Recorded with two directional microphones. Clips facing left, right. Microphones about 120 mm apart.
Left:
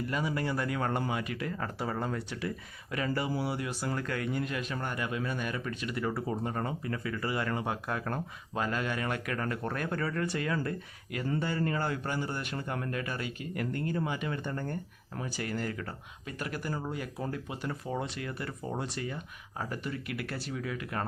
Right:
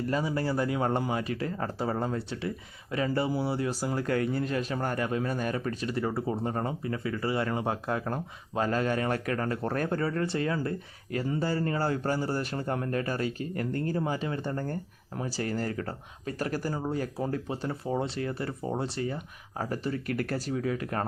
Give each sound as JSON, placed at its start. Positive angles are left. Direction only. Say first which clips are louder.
{"t": 0.1, "sound": "speech", "louder": "right 4 dB", "side_deg": -30}